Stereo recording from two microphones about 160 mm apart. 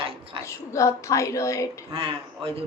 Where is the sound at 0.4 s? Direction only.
20° left (ahead or behind).